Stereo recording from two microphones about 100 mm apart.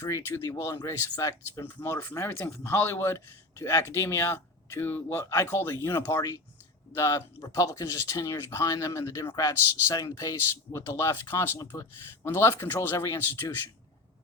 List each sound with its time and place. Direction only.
0.0 s speech: 25° left (ahead or behind)
1.6 s speech: 25° left (ahead or behind); by 10.3 s 40° left (ahead or behind)
10.5 s speech: 30° left (ahead or behind)